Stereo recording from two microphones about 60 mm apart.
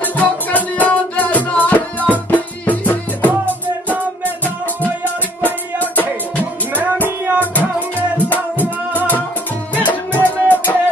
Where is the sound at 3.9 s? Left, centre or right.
Right.